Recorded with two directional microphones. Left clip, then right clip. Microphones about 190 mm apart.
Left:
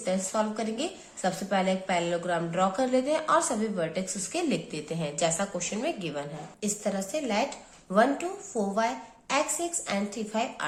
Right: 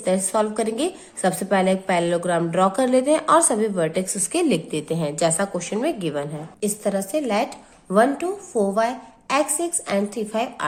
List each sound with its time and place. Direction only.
0.0 s a woman's voice: 45° right (ahead or behind)